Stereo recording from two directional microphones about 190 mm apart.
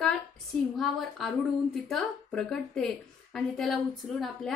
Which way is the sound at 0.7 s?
Centre (ahead or behind).